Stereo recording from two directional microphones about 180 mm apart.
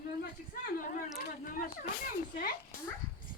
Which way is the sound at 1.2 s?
50° left (ahead or behind).